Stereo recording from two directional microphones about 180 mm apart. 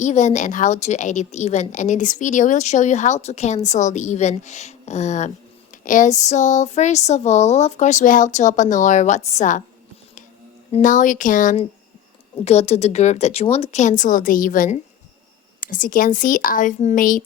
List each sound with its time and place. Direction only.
0.0 s a woman's voice: 40° left (ahead or behind)
10.7 s a woman's voice: 45° left (ahead or behind)